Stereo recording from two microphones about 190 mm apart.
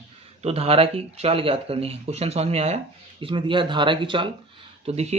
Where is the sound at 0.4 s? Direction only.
30° right (ahead or behind).